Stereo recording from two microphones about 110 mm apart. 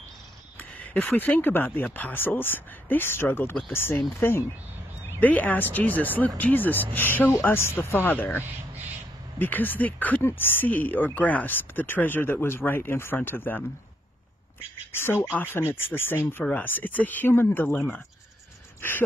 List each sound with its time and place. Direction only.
0.6 s speech: 15° left (ahead or behind)
14.9 s speech: 20° left (ahead or behind)